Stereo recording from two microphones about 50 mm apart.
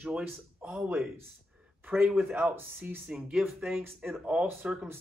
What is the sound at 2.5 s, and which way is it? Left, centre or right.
Speech, right.